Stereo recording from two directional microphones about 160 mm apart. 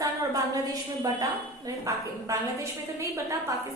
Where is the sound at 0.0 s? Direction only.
20° right (ahead or behind).